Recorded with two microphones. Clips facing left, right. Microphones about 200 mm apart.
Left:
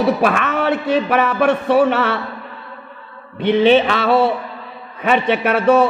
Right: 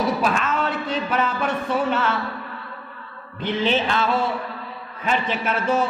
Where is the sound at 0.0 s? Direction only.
65° left (ahead or behind).